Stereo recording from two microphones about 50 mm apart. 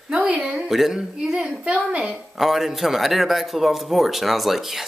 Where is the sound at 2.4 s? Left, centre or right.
Centre.